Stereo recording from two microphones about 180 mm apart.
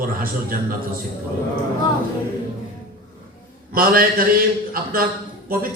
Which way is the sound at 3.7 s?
55° right (ahead or behind).